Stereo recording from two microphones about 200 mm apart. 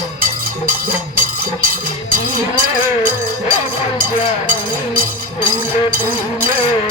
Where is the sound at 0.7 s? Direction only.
45° right (ahead or behind).